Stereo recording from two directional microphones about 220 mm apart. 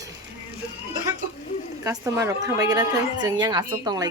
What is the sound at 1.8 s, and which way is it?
A woman's voice, 15° right (ahead or behind).